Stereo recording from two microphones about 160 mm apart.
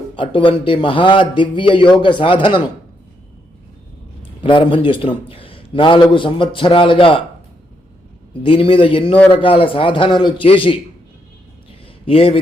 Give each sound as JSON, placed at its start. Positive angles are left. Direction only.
{"t": 0.2, "sound": "a man's voice", "side_deg": 30}
{"t": 4.4, "sound": "a man's voice", "side_deg": 35}
{"t": 8.4, "sound": "a man's voice", "side_deg": 35}
{"t": 9.1, "sound": "speech", "side_deg": 10}
{"t": 9.4, "sound": "a man's voice", "side_deg": 35}
{"t": 12.0, "sound": "a man's voice", "side_deg": 35}